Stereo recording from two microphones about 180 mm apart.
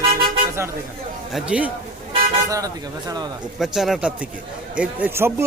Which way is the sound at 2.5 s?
20° right (ahead or behind).